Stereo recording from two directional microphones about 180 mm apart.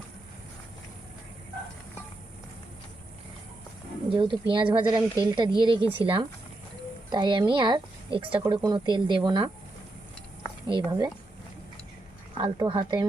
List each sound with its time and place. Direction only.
4.1 s speech: 25° right (ahead or behind)
10.7 s speech: 25° right (ahead or behind)
12.4 s speech: 25° right (ahead or behind)